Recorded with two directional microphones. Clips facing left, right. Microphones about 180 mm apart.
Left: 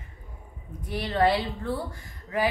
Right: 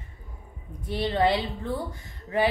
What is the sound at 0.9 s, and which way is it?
Speech, 25° right (ahead or behind).